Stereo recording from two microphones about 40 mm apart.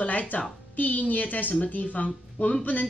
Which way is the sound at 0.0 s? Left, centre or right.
Left.